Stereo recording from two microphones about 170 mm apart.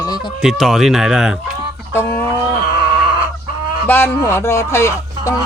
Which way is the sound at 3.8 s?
15° left (ahead or behind).